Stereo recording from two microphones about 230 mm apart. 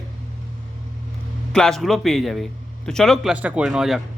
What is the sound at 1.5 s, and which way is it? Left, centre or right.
Speech, centre.